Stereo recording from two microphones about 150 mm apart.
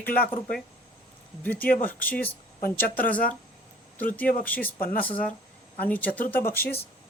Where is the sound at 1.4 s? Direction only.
10° left (ahead or behind).